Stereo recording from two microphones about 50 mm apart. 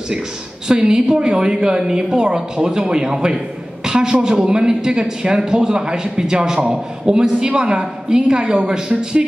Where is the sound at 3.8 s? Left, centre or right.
Centre.